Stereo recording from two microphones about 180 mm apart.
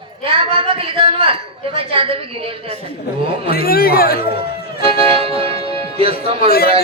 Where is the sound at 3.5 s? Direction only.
55° left (ahead or behind).